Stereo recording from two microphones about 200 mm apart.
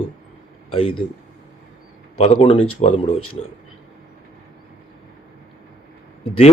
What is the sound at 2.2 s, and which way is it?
Speech, 30° left (ahead or behind).